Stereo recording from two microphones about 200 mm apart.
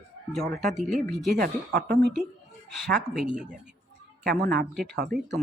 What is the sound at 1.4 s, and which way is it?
Speech, 45° right (ahead or behind).